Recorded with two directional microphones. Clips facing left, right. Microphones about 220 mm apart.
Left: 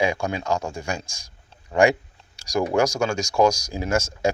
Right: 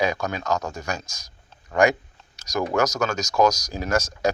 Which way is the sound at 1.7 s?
30° left (ahead or behind).